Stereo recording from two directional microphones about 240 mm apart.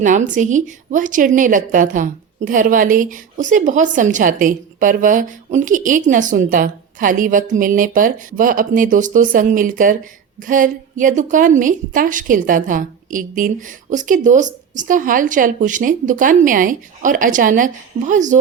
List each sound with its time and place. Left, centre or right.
0.0 s speech: right